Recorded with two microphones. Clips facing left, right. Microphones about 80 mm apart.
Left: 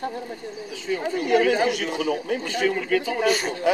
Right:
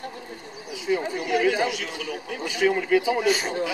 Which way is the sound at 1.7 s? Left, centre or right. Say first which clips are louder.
Left 7 dB; left.